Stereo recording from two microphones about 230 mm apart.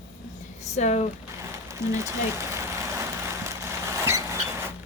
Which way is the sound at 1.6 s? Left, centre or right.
Centre.